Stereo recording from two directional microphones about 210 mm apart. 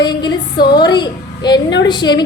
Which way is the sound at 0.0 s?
20° left (ahead or behind).